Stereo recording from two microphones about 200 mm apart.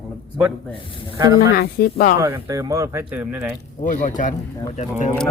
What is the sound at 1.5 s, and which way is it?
Speech, 50° left (ahead or behind).